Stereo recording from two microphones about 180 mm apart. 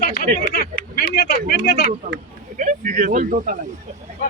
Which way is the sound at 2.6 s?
45° right (ahead or behind).